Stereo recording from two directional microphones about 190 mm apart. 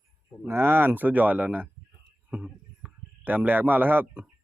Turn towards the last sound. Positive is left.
turn(degrees=-10)  # may be behind; listen again after turning